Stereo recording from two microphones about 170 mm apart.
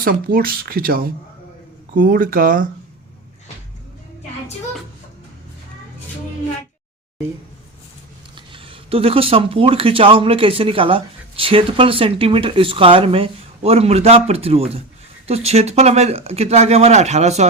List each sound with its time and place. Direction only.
0.0 s speech: 60° right (ahead or behind)
8.4 s speech: 30° right (ahead or behind)